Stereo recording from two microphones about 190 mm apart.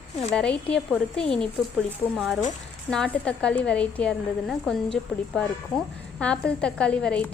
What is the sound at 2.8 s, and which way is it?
Speech, 5° left (ahead or behind).